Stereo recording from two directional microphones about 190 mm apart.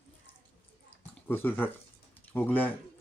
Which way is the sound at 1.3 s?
10° left (ahead or behind).